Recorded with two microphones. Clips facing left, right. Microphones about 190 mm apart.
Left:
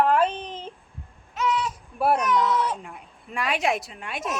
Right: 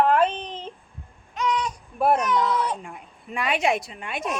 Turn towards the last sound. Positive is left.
turn(degrees=0)  # may be behind; listen again after turning